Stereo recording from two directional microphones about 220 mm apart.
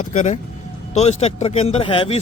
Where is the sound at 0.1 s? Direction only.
35° left (ahead or behind).